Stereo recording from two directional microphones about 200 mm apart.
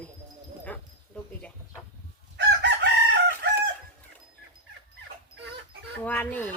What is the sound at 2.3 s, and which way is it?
Chicken, 60° right (ahead or behind).